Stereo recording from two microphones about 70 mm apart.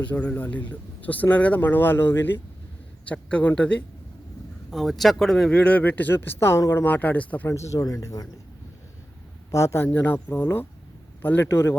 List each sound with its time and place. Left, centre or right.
0.0 s speech: left
3.1 s speech: centre
4.7 s speech: centre
5.5 s speech: centre; by 6.6 s left
6.8 s speech: left
7.4 s speech: left
9.5 s speech: left